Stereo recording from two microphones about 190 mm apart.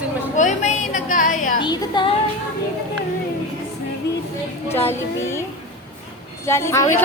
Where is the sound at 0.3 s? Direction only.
40° left (ahead or behind).